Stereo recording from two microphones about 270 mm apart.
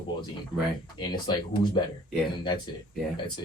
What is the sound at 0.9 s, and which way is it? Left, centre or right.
Speech, centre.